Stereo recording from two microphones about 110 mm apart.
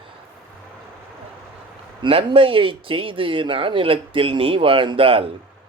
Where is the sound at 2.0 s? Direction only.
55° right (ahead or behind).